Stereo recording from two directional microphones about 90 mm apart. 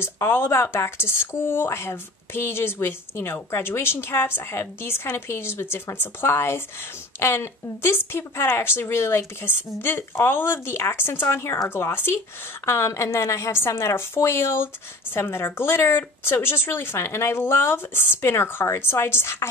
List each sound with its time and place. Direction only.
0.0 s speech: 25° left (ahead or behind)